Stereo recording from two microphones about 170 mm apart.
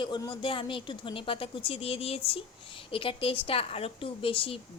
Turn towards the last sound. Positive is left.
turn(degrees=30)  # may be behind; listen again after turning